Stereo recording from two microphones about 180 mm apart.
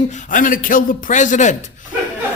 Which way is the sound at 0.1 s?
50° left (ahead or behind).